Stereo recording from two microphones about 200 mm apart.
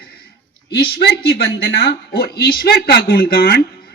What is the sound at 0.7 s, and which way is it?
A woman's voice, 55° left (ahead or behind).